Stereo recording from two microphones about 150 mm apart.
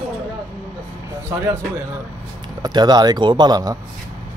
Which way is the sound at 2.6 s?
30° right (ahead or behind).